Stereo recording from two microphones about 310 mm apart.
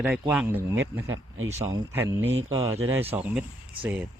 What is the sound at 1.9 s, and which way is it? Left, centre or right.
Speech, centre.